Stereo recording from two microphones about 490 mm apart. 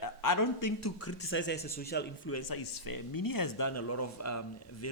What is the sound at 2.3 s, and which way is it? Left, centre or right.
Speech, left.